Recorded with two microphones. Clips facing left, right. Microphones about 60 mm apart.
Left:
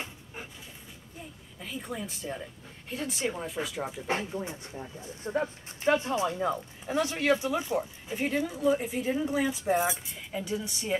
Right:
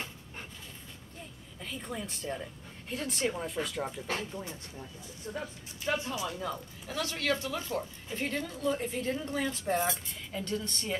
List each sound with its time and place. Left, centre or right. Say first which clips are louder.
1.6 s speech: left 2 dB; centre
4.1 s speech: left 5 dB; centre